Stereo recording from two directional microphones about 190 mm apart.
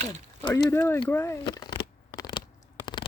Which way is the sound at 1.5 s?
25° left (ahead or behind).